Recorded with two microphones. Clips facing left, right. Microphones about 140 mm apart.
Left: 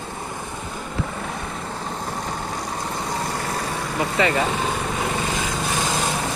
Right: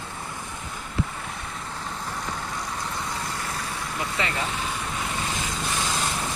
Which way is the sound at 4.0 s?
65° left (ahead or behind).